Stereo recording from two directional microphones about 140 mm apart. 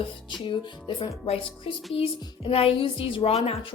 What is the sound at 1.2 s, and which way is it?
Speech, 45° left (ahead or behind).